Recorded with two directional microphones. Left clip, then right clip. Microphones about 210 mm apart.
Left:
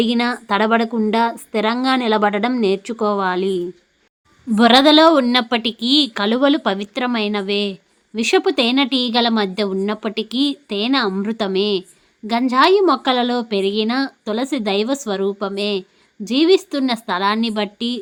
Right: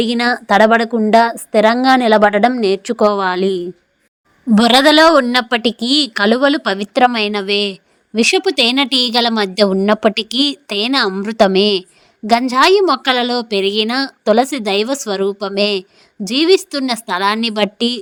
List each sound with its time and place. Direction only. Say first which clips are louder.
0.0 s a woman's voice: right 4 dB; 25° right (ahead or behind)